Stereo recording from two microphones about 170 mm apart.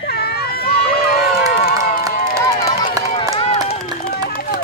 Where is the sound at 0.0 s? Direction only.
70° left (ahead or behind).